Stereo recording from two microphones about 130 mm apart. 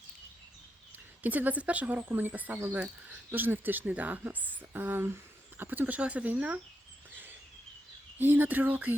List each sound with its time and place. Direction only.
1.2 s speech: 10° right (ahead or behind)
7.1 s a sound: 15° right (ahead or behind)
8.2 s speech: 15° right (ahead or behind)